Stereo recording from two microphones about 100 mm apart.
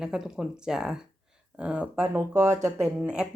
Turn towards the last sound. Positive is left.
turn(degrees=-25)  # may be behind; listen again after turning